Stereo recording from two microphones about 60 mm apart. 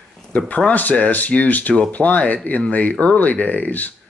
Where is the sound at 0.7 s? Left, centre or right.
Left.